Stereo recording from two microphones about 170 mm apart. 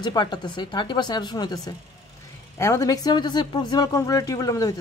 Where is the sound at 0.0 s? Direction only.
25° left (ahead or behind).